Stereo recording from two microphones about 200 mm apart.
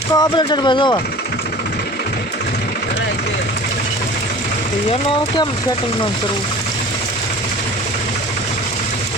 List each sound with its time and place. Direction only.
0.1 s speech: 20° left (ahead or behind)